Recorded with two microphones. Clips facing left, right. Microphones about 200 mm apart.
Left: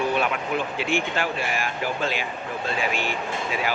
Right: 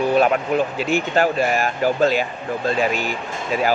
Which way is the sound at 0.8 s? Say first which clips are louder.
Right 6 dB; 40° right (ahead or behind).